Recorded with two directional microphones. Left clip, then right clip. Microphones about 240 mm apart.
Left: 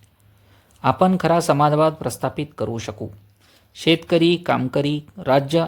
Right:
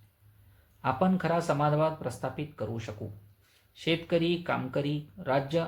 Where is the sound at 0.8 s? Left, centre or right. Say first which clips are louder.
Left 11 dB; left.